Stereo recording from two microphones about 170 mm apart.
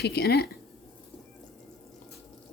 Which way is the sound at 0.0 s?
75° left (ahead or behind).